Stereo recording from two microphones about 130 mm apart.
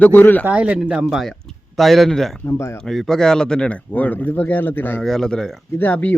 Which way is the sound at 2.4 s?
20° left (ahead or behind).